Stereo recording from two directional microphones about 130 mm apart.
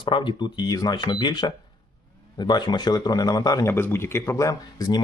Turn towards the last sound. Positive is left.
turn(degrees=30)  # may be behind; listen again after turning